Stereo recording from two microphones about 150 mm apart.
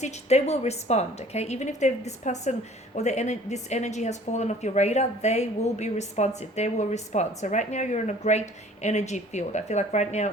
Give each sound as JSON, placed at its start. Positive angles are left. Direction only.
{"t": 0.0, "sound": "a woman's voice", "side_deg": 45}